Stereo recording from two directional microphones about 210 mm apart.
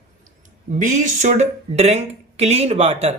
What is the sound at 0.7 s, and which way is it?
A man's voice, 35° right (ahead or behind).